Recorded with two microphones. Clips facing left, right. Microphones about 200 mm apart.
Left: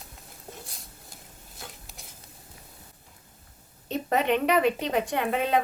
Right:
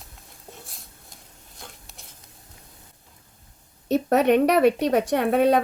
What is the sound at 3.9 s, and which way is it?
A woman's voice, 70° right (ahead or behind).